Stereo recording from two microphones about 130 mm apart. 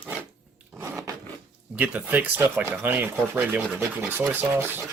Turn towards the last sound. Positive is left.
turn(degrees=-15)  # may be behind; listen again after turning